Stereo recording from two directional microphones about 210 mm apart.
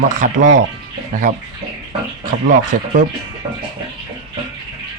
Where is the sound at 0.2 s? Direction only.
40° right (ahead or behind).